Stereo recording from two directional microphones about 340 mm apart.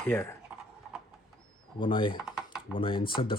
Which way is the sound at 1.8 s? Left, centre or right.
Centre.